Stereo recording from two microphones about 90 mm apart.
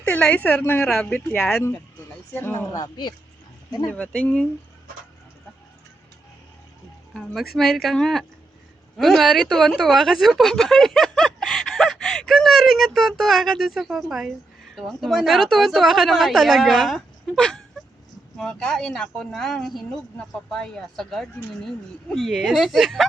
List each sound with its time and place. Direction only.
0.0 s a woman's voice: 20° left (ahead or behind)
0.9 s speech: 10° left (ahead or behind)
1.4 s speech: 25° left (ahead or behind)
2.7 s speech: 50° left (ahead or behind)
3.8 s speech: 20° left (ahead or behind)
7.2 s a woman's voice: centre (ahead or behind)